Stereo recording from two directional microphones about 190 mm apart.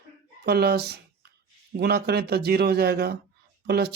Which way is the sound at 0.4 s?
55° right (ahead or behind).